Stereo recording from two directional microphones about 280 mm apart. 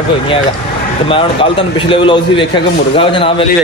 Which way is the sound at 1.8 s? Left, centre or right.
Centre.